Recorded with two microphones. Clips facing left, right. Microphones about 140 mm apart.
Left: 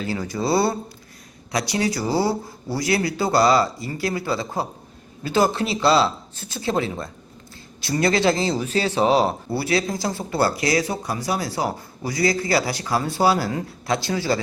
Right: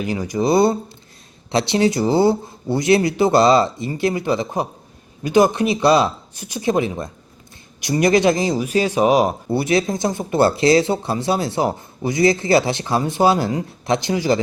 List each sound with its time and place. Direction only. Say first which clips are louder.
0.0 s speech: right 5 dB; 15° right (ahead or behind)